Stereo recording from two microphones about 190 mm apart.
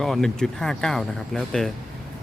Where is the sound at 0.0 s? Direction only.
Centre (ahead or behind).